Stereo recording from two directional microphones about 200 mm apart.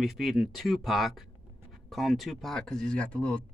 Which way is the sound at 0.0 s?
Centre (ahead or behind).